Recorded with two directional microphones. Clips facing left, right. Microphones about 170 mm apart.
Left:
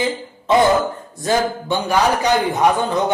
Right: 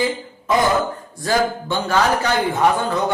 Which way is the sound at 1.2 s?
15° left (ahead or behind).